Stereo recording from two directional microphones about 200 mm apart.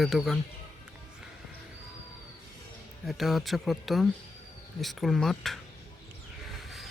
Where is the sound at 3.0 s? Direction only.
Centre (ahead or behind).